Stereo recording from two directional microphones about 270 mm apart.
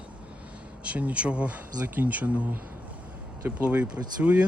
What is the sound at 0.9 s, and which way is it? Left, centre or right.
Speech, centre.